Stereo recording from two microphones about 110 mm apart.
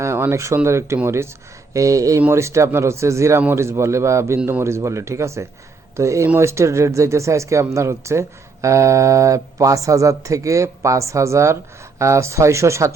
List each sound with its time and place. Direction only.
0.0 s speech: 25° right (ahead or behind)